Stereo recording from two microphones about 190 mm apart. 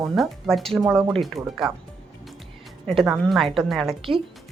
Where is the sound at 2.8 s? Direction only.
Centre (ahead or behind).